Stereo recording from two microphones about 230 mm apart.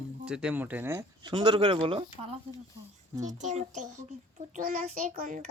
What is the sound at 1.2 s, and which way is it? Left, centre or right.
Speech, right.